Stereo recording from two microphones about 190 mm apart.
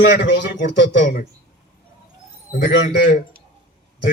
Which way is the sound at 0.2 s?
65° left (ahead or behind).